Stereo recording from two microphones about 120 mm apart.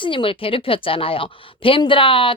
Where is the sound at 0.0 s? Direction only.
45° left (ahead or behind).